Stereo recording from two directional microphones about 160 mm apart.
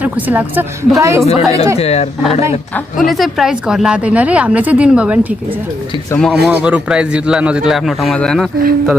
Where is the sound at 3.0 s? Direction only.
Centre (ahead or behind).